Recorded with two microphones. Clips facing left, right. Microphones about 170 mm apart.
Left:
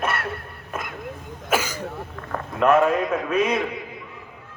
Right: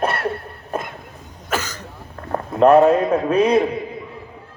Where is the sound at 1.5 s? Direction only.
10° left (ahead or behind).